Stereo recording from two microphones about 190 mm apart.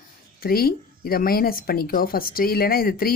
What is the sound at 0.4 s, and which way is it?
Speech, 50° left (ahead or behind).